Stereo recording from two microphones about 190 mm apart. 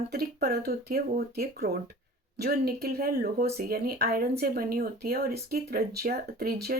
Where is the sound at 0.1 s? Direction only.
55° right (ahead or behind).